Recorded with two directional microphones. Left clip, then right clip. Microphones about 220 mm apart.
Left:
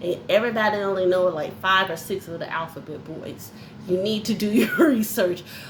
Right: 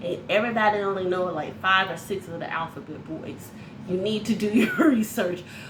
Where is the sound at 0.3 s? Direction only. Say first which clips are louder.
Left 1 dB; 50° left (ahead or behind).